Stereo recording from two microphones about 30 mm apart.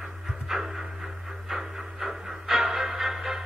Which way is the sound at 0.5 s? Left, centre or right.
Centre.